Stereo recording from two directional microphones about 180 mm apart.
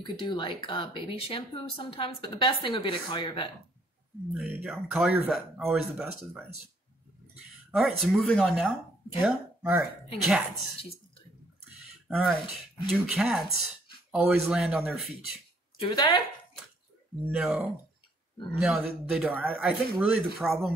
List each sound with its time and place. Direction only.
0.0 s speech: 25° left (ahead or behind)
4.3 s speech: 5° right (ahead or behind)
7.7 s speech: centre (ahead or behind)
12.1 s a man's voice: centre (ahead or behind)
15.8 s speech: 25° left (ahead or behind)
17.4 s speech: 5° right (ahead or behind)